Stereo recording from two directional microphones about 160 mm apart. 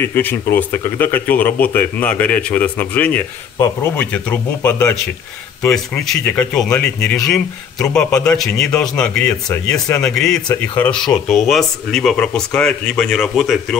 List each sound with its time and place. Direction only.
0.0 s speech: 10° left (ahead or behind)
9.5 s speech: 15° left (ahead or behind)
10.0 s speech: 5° left (ahead or behind)